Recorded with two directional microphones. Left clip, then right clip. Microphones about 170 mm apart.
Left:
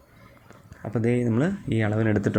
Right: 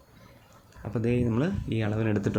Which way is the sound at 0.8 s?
15° left (ahead or behind).